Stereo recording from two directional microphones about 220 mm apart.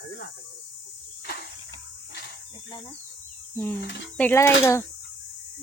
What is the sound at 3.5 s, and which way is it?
Speech, 10° left (ahead or behind).